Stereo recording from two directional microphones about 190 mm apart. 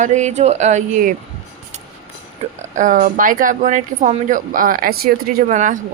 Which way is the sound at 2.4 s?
35° right (ahead or behind).